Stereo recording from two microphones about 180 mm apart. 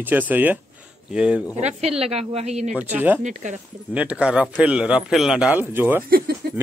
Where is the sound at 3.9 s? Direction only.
5° right (ahead or behind).